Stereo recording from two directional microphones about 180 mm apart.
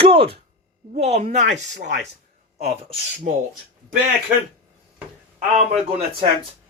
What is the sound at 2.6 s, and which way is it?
Speech, 35° right (ahead or behind).